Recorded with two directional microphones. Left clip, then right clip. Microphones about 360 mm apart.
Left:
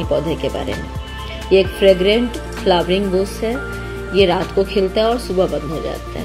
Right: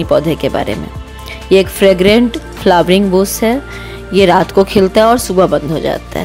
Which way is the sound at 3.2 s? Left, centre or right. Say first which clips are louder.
Right 7 dB; right.